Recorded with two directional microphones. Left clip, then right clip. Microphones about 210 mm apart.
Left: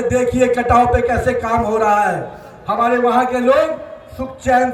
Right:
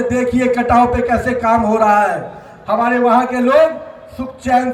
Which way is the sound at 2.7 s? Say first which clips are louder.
Right 2 dB; 15° left (ahead or behind).